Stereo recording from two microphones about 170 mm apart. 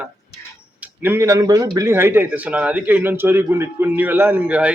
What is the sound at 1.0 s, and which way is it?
Speech, 15° right (ahead or behind).